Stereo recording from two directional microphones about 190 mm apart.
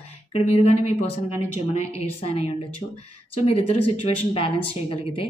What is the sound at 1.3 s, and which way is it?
Speech, 15° right (ahead or behind).